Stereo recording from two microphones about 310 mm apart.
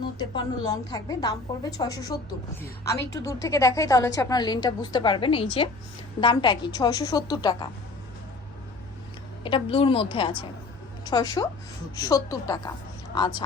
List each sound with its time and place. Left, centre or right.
0.2 s a woman's voice: centre
3.2 s a woman's voice: centre
9.4 s a woman's voice: centre